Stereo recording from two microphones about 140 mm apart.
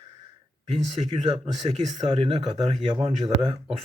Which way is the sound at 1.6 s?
45° right (ahead or behind).